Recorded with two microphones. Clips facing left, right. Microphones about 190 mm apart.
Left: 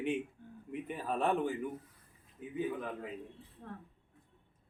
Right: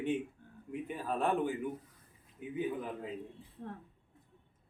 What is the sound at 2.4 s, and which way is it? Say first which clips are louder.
Speech: right 1 dB; 20° right (ahead or behind).